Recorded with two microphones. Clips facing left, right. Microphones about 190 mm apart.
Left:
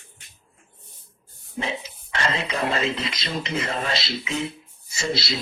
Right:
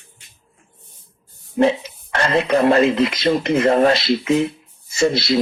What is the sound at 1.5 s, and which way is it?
Speech, 60° right (ahead or behind).